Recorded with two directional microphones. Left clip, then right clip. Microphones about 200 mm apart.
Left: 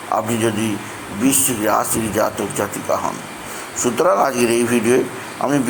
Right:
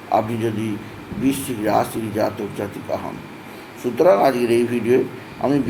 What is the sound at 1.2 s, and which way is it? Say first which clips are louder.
Speech: left 4 dB; 5° left (ahead or behind).